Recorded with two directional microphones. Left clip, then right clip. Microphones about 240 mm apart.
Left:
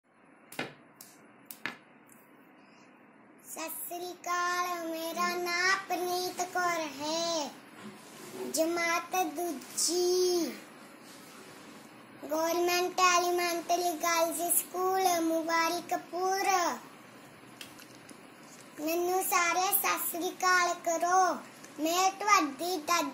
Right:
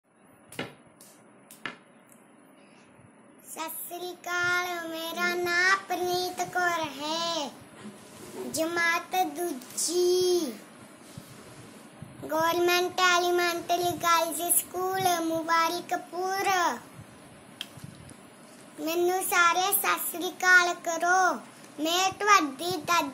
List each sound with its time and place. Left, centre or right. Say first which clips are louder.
3.5 s a child's voice: right 3 dB; centre
8.5 s a child's voice: right 3 dB; centre
12.3 s a child's voice: right 4 dB; centre
18.9 s a child's voice: right 3 dB; centre